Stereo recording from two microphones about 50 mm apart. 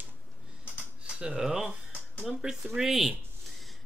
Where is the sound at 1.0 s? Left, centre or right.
Centre.